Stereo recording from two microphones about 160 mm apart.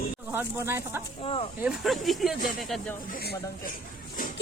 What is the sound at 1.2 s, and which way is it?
Speech, 35° left (ahead or behind).